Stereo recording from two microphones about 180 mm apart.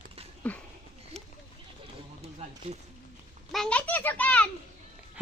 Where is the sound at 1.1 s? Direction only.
5° left (ahead or behind).